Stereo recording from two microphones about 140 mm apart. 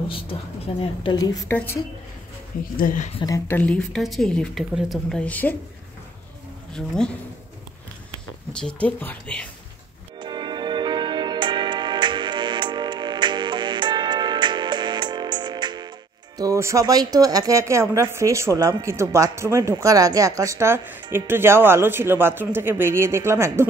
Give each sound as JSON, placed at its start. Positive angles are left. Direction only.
{"t": 0.1, "sound": "speech", "side_deg": 40}
{"t": 1.1, "sound": "a woman's voice", "side_deg": 25}
{"t": 2.8, "sound": "speech", "side_deg": 70}
{"t": 3.3, "sound": "speech", "side_deg": 20}
{"t": 5.2, "sound": "speech", "side_deg": 10}
{"t": 6.8, "sound": "speech", "side_deg": 5}
{"t": 8.5, "sound": "speech", "side_deg": 5}
{"t": 10.1, "sound": "music", "side_deg": -30}
{"t": 16.3, "sound": "speech", "side_deg": -25}